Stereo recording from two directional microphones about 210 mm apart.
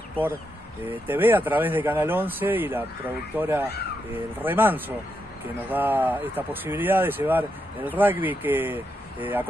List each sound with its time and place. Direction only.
0.8 s speech: 10° right (ahead or behind)